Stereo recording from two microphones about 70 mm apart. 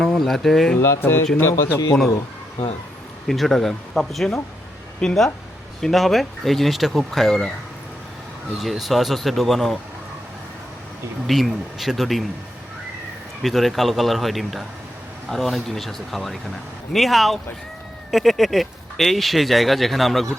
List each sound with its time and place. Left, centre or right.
0.0 s speech: centre
0.8 s a man's voice: left
3.2 s speech: centre
8.6 s speech: centre
11.3 s speech: centre
13.4 s speech: centre